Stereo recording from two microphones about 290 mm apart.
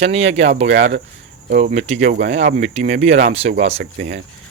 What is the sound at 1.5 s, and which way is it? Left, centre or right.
Speech, right.